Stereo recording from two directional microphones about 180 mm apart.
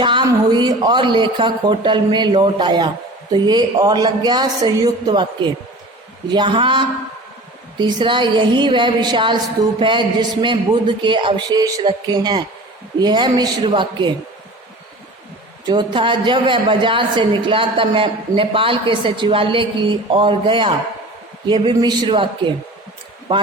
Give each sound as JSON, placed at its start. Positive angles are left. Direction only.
{"t": 0.0, "sound": "a woman's voice", "side_deg": -25}
{"t": 15.6, "sound": "a woman's voice", "side_deg": -25}